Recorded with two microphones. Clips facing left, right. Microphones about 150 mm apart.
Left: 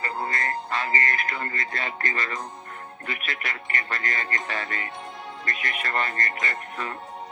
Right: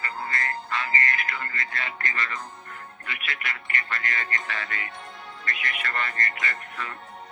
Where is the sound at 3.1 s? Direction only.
40° left (ahead or behind).